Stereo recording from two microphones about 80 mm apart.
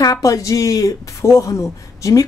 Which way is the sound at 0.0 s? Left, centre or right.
Left.